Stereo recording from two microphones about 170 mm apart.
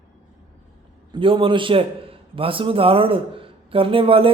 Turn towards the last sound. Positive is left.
turn(degrees=-30)  # may be behind; listen again after turning